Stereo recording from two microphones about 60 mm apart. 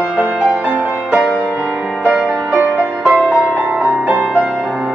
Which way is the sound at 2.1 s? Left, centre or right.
Right.